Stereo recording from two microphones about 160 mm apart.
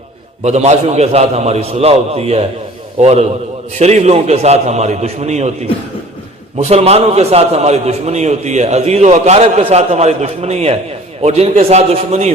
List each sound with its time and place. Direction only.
0.4 s a man's voice: 45° right (ahead or behind)